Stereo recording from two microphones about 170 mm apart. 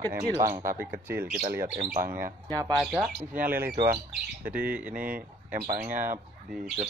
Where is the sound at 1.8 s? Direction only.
60° right (ahead or behind).